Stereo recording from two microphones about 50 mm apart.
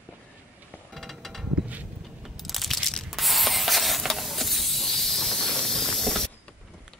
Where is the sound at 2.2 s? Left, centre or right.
Centre.